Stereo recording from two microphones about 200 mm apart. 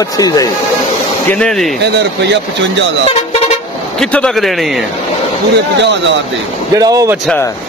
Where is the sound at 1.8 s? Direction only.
60° right (ahead or behind).